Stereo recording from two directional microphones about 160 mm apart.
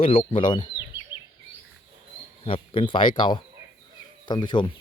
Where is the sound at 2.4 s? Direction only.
35° left (ahead or behind).